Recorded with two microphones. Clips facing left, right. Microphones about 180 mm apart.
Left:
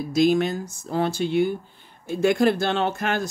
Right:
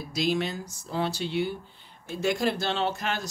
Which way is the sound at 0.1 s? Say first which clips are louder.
Left 8 dB; 50° left (ahead or behind).